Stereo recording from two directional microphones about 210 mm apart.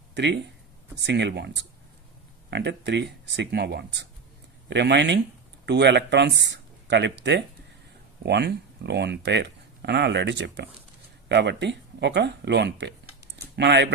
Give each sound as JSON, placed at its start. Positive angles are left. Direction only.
{"t": 0.1, "sound": "speech", "side_deg": -55}